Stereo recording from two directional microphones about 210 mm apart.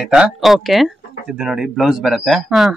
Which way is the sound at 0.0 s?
5° right (ahead or behind).